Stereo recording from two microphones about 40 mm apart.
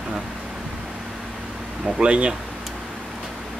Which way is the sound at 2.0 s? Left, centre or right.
Right.